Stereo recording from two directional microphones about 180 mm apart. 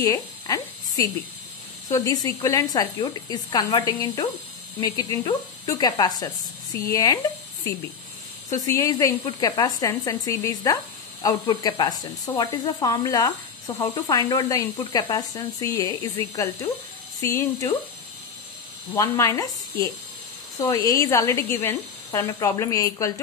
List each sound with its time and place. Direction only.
0.0 s a sound: 20° left (ahead or behind)
1.9 s speech: 20° left (ahead or behind)
8.5 s speech: 20° left (ahead or behind)
18.9 s speech: 20° left (ahead or behind)